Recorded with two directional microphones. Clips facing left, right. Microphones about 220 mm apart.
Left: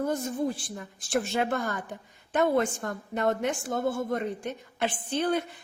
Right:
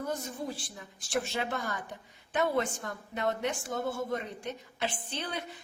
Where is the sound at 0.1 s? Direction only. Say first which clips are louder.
Left 7 dB; 50° left (ahead or behind).